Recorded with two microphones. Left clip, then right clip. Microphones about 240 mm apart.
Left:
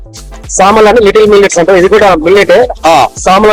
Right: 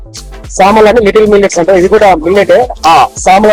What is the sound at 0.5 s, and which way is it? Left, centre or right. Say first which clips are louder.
Speech: even; left.